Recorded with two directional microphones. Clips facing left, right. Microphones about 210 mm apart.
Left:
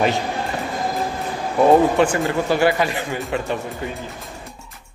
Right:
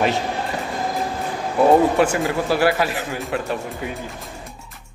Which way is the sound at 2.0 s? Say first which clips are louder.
Left 1 dB; 5° right (ahead or behind).